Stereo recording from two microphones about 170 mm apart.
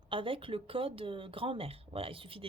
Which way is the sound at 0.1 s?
30° right (ahead or behind).